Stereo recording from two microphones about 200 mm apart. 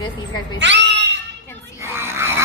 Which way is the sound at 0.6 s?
60° right (ahead or behind).